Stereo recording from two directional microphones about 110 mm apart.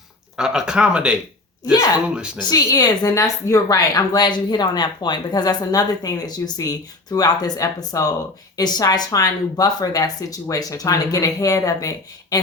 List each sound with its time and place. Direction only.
0.3 s speech: 5° right (ahead or behind)
2.6 s a woman's voice: 30° left (ahead or behind)